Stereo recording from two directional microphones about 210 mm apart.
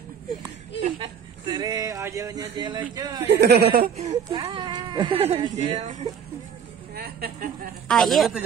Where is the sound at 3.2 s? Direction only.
50° right (ahead or behind).